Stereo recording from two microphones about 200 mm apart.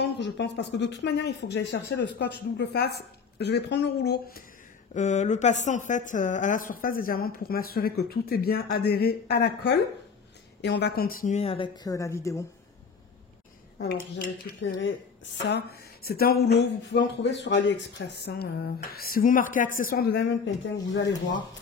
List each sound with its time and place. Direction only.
0.0 s speech: 60° left (ahead or behind)
4.9 s a woman's voice: 35° left (ahead or behind); by 12.4 s 15° left (ahead or behind)
13.7 s speech: 50° left (ahead or behind)
15.4 s speech: 50° left (ahead or behind)